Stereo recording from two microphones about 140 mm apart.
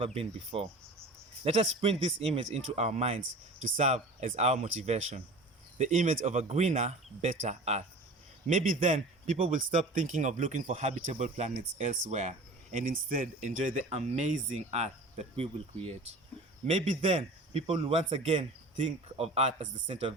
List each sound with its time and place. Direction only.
0.0 s a man's voice: 45° right (ahead or behind)
3.6 s a man's voice: 60° right (ahead or behind)
4.4 s a man's voice: 50° right (ahead or behind)
5.7 s a man's voice: 60° right (ahead or behind)
8.4 s a man's voice: 65° right (ahead or behind); by 16.0 s 45° right (ahead or behind)
16.6 s a man's voice: 60° right (ahead or behind)